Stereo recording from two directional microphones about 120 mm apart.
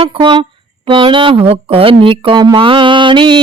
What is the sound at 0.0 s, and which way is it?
Speech, 45° right (ahead or behind).